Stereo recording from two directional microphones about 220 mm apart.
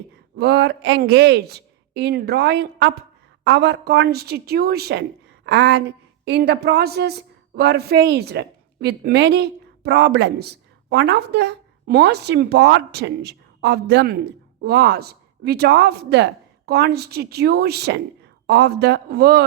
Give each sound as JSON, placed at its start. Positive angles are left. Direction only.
{"t": 0.3, "sound": "a woman's voice", "side_deg": -50}